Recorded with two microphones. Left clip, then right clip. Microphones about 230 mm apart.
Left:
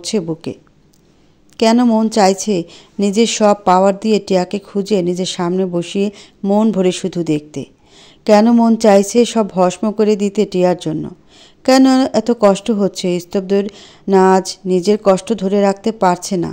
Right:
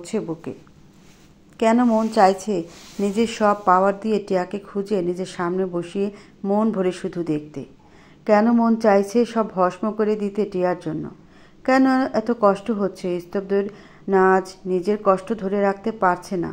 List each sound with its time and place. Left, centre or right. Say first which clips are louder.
0.3 s speech: left 7 dB; left
1.6 s speech: left 5 dB; left
2.5 s speech: left 6 dB; left
3.4 s speech: left 5 dB; left